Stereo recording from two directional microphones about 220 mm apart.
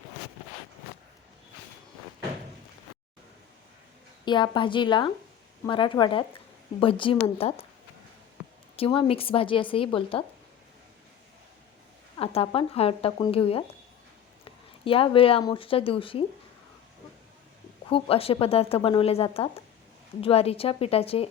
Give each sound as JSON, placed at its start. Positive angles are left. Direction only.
{"t": 4.3, "sound": "a woman's voice", "side_deg": 20}
{"t": 8.7, "sound": "a woman's voice", "side_deg": 25}
{"t": 12.1, "sound": "a woman's voice", "side_deg": 25}
{"t": 17.8, "sound": "a woman's voice", "side_deg": 25}